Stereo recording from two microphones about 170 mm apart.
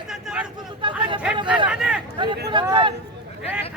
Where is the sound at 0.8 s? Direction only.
30° right (ahead or behind).